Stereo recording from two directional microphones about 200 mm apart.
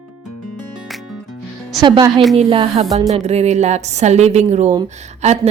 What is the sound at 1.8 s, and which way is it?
A woman's voice, 20° right (ahead or behind).